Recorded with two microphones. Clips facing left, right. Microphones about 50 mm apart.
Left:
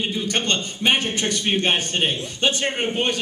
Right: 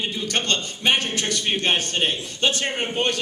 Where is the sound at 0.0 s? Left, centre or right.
Centre.